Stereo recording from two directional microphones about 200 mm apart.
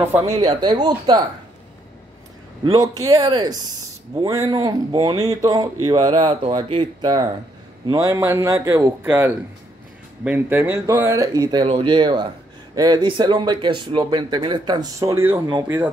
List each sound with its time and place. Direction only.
0.4 s speech: 20° right (ahead or behind)
2.6 s a man's voice: 20° right (ahead or behind)